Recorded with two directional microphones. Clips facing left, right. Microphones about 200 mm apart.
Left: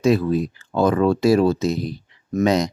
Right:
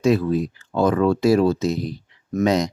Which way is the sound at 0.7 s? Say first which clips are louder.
Left 1 dB; 30° left (ahead or behind).